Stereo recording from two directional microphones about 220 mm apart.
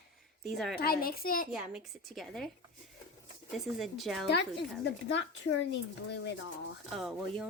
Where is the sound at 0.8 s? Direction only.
40° left (ahead or behind).